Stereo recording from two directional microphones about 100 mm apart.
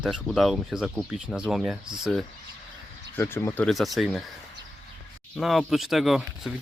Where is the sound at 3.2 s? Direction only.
25° left (ahead or behind).